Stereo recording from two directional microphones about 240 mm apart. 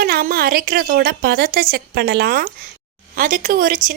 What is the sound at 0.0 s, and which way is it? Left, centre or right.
A woman's voice, right.